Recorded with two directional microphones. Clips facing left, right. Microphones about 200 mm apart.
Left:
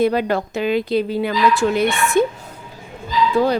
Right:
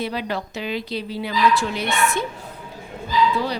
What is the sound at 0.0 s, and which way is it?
Speech, 50° left (ahead or behind).